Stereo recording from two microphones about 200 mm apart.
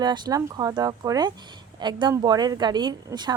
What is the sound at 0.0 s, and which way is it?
A woman's voice, 20° right (ahead or behind).